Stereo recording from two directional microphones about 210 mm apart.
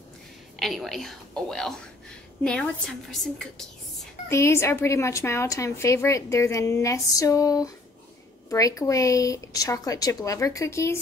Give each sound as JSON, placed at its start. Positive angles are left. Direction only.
{"t": 0.6, "sound": "speech", "side_deg": 0}
{"t": 4.3, "sound": "a woman's voice", "side_deg": 15}